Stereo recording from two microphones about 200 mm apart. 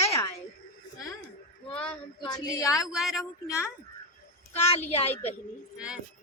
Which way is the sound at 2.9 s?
Centre (ahead or behind).